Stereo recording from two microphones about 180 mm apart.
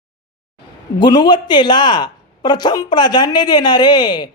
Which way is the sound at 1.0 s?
25° left (ahead or behind).